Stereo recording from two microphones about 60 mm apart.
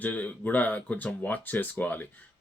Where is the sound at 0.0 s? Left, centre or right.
Left.